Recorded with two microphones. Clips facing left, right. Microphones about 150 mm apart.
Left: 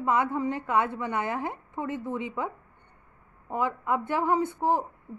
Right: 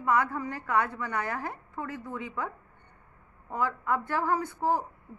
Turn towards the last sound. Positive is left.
turn(degrees=20)  # may be behind; listen again after turning